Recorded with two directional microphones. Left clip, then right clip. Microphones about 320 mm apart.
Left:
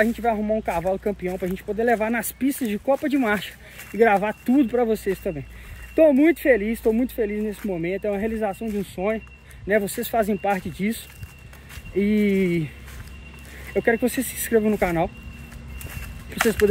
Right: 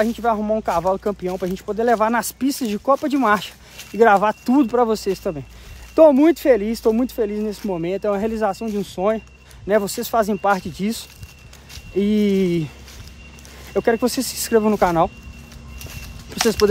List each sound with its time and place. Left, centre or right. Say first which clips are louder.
0.0 s speech: right 2 dB; centre
13.7 s speech: right 3 dB; centre
16.3 s a sound: right 2 dB; centre